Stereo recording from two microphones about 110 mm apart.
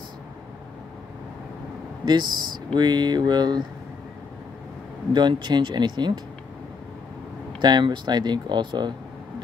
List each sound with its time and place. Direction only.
2.0 s speech: 40° right (ahead or behind)
5.1 s speech: 40° right (ahead or behind)
7.6 s speech: 40° right (ahead or behind)